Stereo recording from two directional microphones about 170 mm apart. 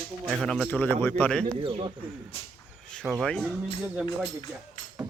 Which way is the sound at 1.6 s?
30° right (ahead or behind).